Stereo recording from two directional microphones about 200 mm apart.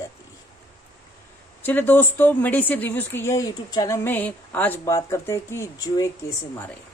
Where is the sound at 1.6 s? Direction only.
10° left (ahead or behind).